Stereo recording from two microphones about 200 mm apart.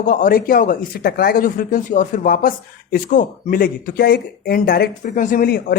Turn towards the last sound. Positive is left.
turn(degrees=50)  # may be behind; listen again after turning